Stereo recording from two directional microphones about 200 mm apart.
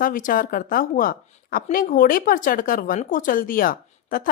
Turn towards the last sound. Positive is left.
turn(degrees=45)  # may be behind; listen again after turning